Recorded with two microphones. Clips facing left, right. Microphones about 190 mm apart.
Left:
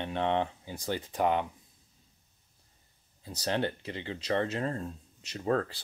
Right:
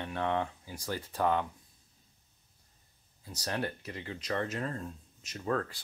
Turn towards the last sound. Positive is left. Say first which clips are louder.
# left 4 dB
turn(degrees=30)  # may be behind; listen again after turning